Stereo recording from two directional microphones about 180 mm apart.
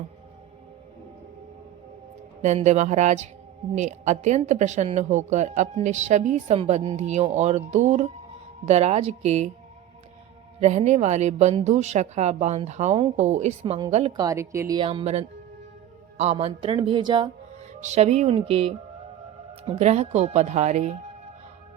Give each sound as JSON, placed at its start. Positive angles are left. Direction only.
{"t": 2.4, "sound": "a woman's voice", "side_deg": -40}
{"t": 10.6, "sound": "a woman's voice", "side_deg": -40}
{"t": 14.1, "sound": "speech", "side_deg": -20}
{"t": 14.8, "sound": "a woman's voice", "side_deg": -30}
{"t": 17.7, "sound": "a woman's voice", "side_deg": -40}